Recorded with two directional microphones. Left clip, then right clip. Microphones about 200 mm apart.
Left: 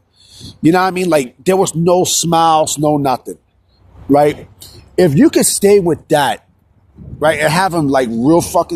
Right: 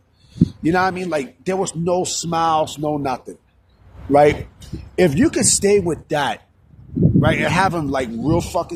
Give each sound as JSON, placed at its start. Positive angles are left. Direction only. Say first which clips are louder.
{"t": 0.2, "sound": "a man's voice", "louder": "left 3 dB", "side_deg": 50}
{"t": 4.9, "sound": "speech", "louder": "left 6 dB", "side_deg": 30}
{"t": 6.1, "sound": "a man's voice", "louder": "left 7 dB", "side_deg": 45}